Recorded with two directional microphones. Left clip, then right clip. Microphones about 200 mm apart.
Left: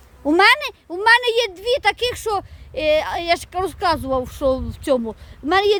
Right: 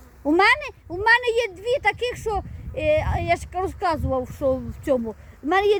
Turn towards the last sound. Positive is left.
turn(degrees=15)  # may be behind; listen again after turning